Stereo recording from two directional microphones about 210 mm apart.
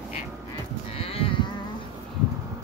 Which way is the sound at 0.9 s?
25° left (ahead or behind).